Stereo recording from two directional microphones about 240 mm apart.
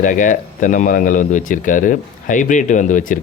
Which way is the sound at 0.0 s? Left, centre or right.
Left.